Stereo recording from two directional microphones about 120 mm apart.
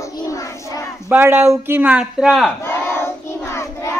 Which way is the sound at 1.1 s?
20° right (ahead or behind).